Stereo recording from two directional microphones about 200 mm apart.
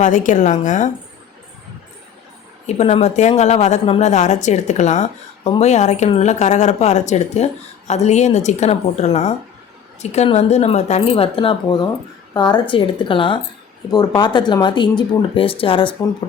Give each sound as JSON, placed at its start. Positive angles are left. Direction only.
{"t": 0.0, "sound": "speech", "side_deg": 40}
{"t": 2.6, "sound": "speech", "side_deg": 35}